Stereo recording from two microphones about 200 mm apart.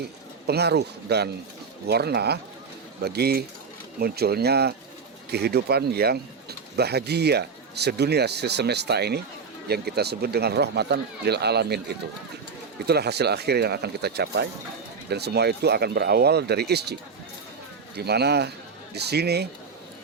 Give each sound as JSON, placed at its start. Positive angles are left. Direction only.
{"t": 0.0, "sound": "speech", "side_deg": -55}
{"t": 17.9, "sound": "speech", "side_deg": -55}